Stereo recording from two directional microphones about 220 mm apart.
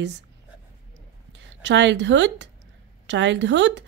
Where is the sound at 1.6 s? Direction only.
55° right (ahead or behind).